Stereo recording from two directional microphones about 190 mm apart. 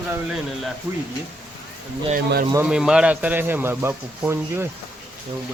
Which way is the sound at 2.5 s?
5° right (ahead or behind).